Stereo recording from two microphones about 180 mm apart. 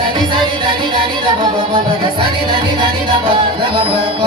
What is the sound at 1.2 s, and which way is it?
Music, 25° right (ahead or behind).